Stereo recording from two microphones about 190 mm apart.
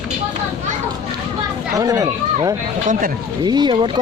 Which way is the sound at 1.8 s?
20° right (ahead or behind).